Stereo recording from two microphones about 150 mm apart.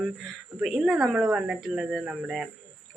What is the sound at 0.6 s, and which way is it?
A woman's voice, centre (ahead or behind).